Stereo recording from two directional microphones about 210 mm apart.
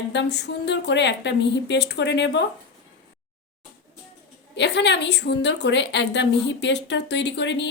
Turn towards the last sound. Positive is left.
turn(degrees=55)  # may be behind; listen again after turning